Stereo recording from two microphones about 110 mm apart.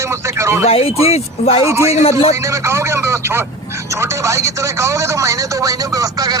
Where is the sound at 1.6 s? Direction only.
25° right (ahead or behind).